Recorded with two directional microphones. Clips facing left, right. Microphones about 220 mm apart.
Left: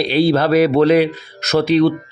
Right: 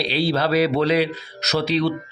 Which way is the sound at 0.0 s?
50° left (ahead or behind).